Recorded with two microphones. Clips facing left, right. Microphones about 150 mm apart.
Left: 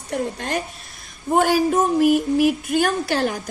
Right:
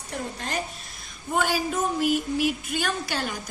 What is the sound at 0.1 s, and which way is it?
A woman's voice, 50° left (ahead or behind).